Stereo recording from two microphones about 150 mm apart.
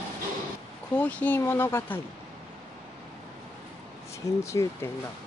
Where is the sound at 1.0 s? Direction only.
10° left (ahead or behind).